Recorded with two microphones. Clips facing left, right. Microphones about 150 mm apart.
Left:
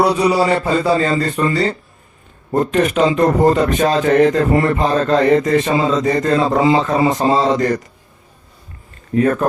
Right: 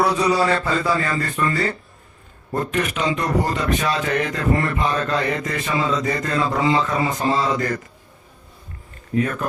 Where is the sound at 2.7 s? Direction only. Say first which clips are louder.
Left 9 dB; 35° left (ahead or behind).